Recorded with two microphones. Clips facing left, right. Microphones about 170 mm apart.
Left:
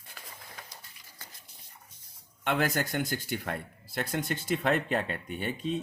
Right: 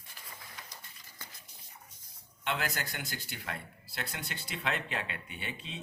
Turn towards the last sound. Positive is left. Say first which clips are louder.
# left 11 dB
turn(degrees=45)  # may be behind; listen again after turning